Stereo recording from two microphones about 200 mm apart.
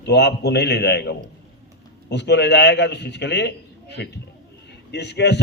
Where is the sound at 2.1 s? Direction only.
60° left (ahead or behind).